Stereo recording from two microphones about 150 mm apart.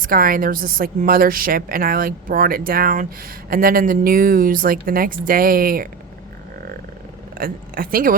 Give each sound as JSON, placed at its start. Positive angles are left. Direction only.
{"t": 0.0, "sound": "a woman's voice", "side_deg": -70}
{"t": 7.3, "sound": "speech", "side_deg": -75}